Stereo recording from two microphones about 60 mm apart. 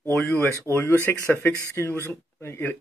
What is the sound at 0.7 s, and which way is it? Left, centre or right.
Speech, left.